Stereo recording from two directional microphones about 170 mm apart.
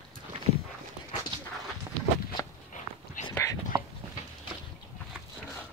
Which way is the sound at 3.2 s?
45° left (ahead or behind).